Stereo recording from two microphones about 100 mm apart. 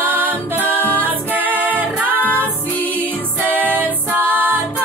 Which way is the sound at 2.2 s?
15° left (ahead or behind).